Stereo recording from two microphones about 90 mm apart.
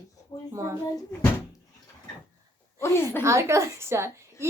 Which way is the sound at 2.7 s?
30° left (ahead or behind).